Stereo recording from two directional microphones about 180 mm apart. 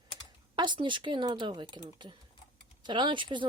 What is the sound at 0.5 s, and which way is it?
Speech, 25° right (ahead or behind).